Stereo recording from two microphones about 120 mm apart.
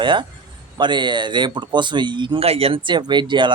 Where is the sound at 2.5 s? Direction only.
55° right (ahead or behind).